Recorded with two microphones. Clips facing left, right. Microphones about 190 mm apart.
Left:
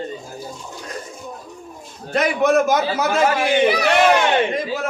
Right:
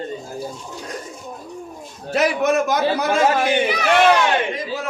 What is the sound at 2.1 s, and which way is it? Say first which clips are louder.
A man's voice: left 1 dB; 5° right (ahead or behind).